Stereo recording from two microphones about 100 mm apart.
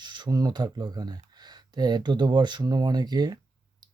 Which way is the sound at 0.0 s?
50° right (ahead or behind).